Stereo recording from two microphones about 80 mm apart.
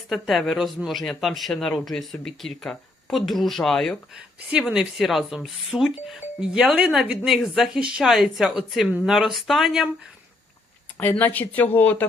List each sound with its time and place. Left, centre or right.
0.1 s speech: centre
4.4 s a woman's voice: centre
4.7 s speech: centre
11.2 s speech: left